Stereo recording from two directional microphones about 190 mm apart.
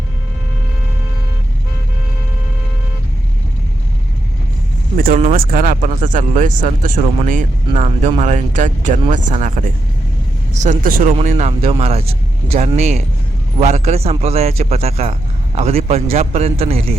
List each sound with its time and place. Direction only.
4.9 s vehicle: 50° right (ahead or behind)
5.2 s speech: 45° right (ahead or behind)
10.5 s speech: 40° right (ahead or behind)